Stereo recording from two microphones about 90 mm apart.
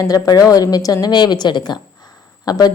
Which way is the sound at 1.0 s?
55° left (ahead or behind).